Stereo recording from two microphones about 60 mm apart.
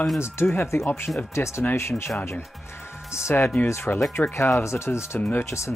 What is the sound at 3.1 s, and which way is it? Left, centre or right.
Speech, left.